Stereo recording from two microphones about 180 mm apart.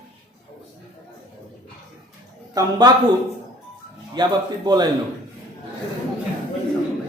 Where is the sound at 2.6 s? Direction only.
20° right (ahead or behind).